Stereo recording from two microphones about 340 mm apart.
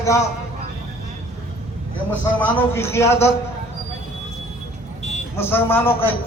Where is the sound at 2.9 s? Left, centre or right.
Centre.